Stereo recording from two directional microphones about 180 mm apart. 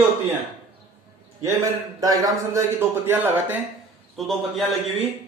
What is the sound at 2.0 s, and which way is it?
Speech, 20° right (ahead or behind).